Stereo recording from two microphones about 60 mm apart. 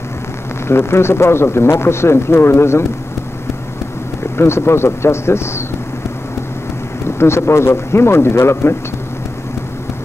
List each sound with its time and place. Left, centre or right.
0.7 s speech: left
4.4 s speech: left
7.1 s speech: left